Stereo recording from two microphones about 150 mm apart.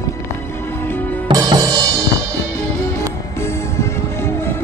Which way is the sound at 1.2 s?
25° right (ahead or behind).